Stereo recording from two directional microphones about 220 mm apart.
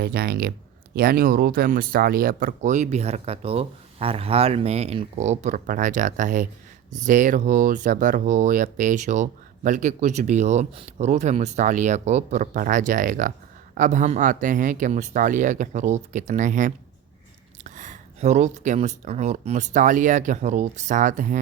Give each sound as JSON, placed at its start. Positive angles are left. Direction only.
{"t": 0.0, "sound": "speech", "side_deg": -45}